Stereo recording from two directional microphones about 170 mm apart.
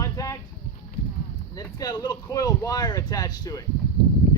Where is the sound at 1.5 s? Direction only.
20° left (ahead or behind).